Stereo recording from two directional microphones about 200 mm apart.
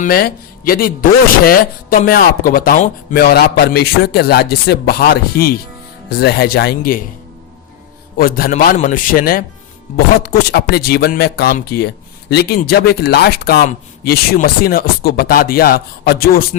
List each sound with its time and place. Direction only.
0.0 s speech: 50° left (ahead or behind)
8.2 s speech: 45° left (ahead or behind)